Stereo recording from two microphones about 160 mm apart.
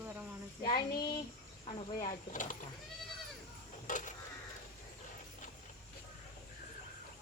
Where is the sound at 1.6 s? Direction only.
35° left (ahead or behind).